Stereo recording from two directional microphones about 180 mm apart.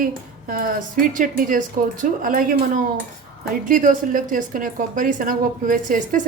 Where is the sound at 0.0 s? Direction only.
50° right (ahead or behind).